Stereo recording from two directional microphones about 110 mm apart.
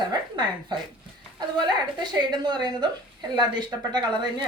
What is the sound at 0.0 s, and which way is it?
Speech, 45° right (ahead or behind).